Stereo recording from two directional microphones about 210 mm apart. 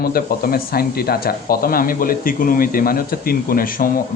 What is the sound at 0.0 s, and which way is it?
Speech, 45° left (ahead or behind).